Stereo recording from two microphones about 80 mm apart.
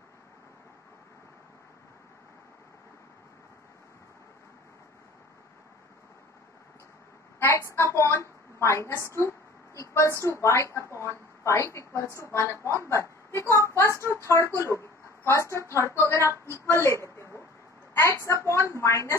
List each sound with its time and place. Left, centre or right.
7.3 s a woman's voice: left
16.7 s a sound: left
18.2 s a woman's voice: left